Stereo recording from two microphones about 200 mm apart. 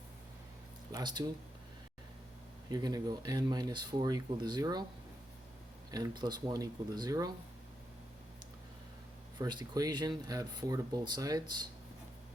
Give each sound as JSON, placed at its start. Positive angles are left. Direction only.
{"t": 0.9, "sound": "speech", "side_deg": -20}
{"t": 2.6, "sound": "speech", "side_deg": -20}
{"t": 5.9, "sound": "speech", "side_deg": -20}
{"t": 9.4, "sound": "speech", "side_deg": -20}